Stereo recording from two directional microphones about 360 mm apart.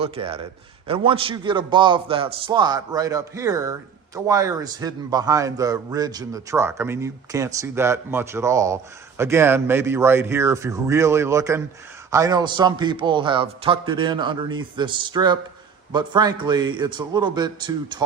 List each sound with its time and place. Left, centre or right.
0.0 s a man's voice: centre